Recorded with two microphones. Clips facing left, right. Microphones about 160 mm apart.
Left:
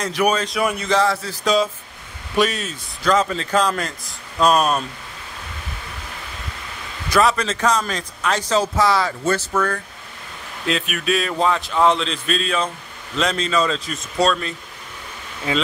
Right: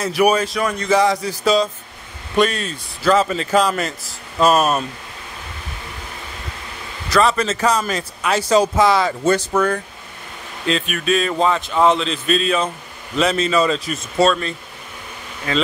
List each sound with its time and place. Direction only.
0.0 s a man's voice: 10° right (ahead or behind)
0.6 s speech: 10° left (ahead or behind)
0.8 s a man's voice: 15° right (ahead or behind)
1.4 s speech: centre (ahead or behind)
7.1 s a man's voice: centre (ahead or behind); by 9.8 s 20° right (ahead or behind)
10.7 s speech: centre (ahead or behind)
15.5 s speech: 15° left (ahead or behind)